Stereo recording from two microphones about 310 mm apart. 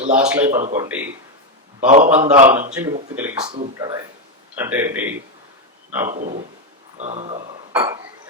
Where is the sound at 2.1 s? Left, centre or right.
Right.